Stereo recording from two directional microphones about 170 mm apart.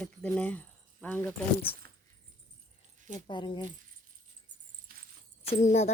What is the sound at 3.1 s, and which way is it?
Speech, 25° left (ahead or behind).